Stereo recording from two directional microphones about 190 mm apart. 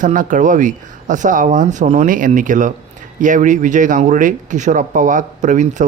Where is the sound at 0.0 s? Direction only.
40° right (ahead or behind).